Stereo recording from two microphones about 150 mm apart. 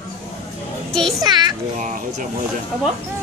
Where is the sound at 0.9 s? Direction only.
5° left (ahead or behind).